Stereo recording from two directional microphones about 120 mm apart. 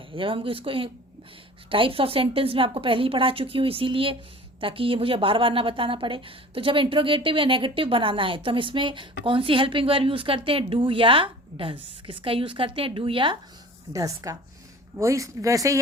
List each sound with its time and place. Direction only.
0.1 s speech: 45° right (ahead or behind)
13.9 s speech: 30° right (ahead or behind)